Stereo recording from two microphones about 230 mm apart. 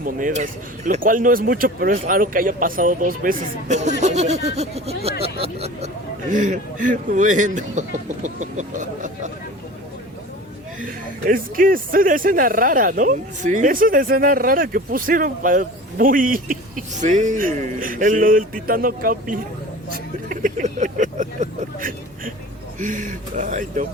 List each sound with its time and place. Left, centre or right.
0.0 s speech: right
4.0 s a sound: right
6.3 s speech: right
11.3 s speech: right